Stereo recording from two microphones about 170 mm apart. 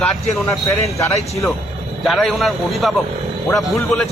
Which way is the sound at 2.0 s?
Centre (ahead or behind).